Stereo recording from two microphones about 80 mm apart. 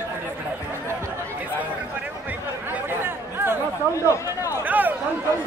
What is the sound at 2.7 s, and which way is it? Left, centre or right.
Chatter, right.